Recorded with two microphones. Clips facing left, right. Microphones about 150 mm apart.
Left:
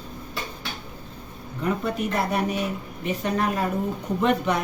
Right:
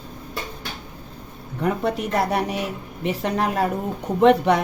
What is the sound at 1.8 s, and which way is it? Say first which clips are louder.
A woman's voice: right 3 dB; 70° right (ahead or behind).